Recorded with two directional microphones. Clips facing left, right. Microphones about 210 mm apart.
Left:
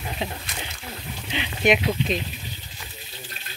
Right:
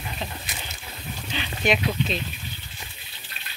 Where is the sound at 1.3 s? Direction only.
15° left (ahead or behind).